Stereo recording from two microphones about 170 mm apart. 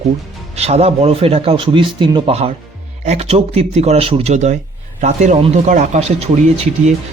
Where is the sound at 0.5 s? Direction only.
40° right (ahead or behind).